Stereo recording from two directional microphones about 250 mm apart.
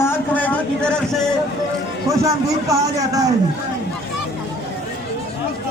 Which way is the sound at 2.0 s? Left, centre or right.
Centre.